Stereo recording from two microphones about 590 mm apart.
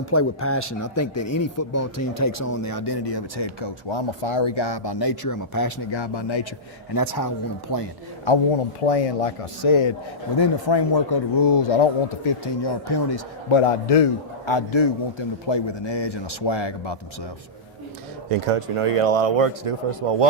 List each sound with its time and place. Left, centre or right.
0.1 s speech: left
5.9 s speech: left
6.9 s speech: left
8.8 s speech: left
13.6 s a man's voice: left
14.4 s speech: left
18.3 s speech: right